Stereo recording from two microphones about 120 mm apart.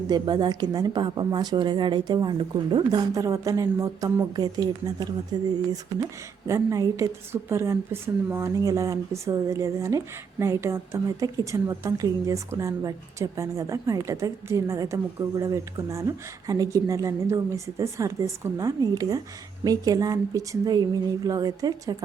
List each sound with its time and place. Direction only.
0.1 s a woman's voice: 35° right (ahead or behind)
6.5 s a woman's voice: 25° right (ahead or behind)